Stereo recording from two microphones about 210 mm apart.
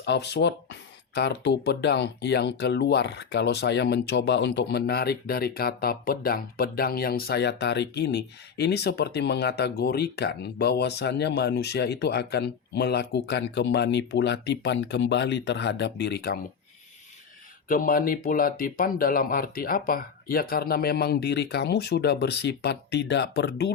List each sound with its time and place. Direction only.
0.0 s speech: 55° left (ahead or behind)
17.7 s speech: 40° left (ahead or behind)